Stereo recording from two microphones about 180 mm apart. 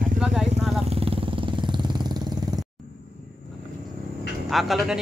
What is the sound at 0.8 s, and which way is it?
Vehicle, 30° right (ahead or behind).